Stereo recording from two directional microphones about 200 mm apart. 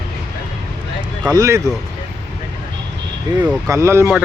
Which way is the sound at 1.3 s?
15° right (ahead or behind).